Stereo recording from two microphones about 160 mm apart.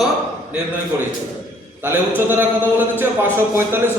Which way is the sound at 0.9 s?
15° right (ahead or behind).